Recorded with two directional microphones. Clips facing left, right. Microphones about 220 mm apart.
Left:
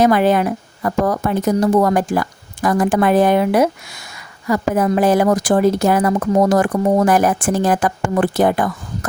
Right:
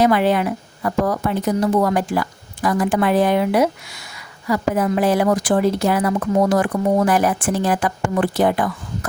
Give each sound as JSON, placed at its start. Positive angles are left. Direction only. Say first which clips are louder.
{"t": 0.0, "sound": "a woman's voice", "louder": "left 2 dB", "side_deg": 45}